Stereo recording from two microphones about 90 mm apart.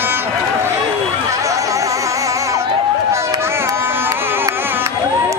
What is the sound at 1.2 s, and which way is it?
Music, 35° right (ahead or behind).